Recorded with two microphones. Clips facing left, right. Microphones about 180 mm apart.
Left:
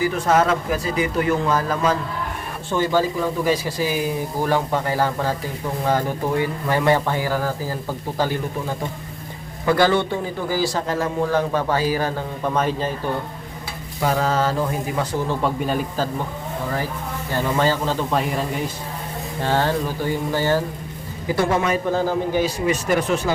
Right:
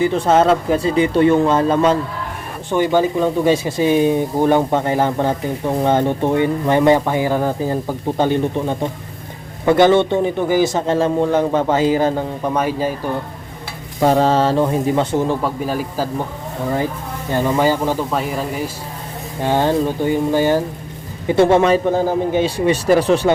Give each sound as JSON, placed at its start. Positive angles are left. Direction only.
{"t": 0.0, "sound": "speech", "side_deg": -25}
{"t": 14.0, "sound": "speech", "side_deg": -30}
{"t": 15.4, "sound": "speech", "side_deg": 0}
{"t": 17.3, "sound": "speech", "side_deg": -15}
{"t": 18.1, "sound": "speech", "side_deg": 0}
{"t": 19.4, "sound": "speech", "side_deg": -15}
{"t": 21.9, "sound": "a man's voice", "side_deg": -20}